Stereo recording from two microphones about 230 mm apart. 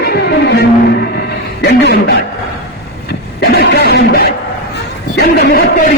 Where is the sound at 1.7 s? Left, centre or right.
Left.